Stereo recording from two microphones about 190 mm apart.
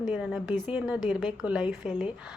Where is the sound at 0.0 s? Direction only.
Centre (ahead or behind).